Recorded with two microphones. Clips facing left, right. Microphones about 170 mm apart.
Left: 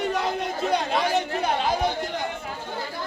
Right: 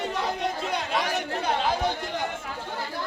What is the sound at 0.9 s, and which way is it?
Speech, 30° left (ahead or behind).